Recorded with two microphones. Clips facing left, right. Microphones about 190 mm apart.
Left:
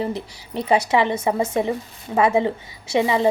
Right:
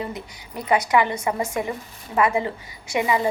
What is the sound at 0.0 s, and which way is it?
A woman's voice, 30° left (ahead or behind).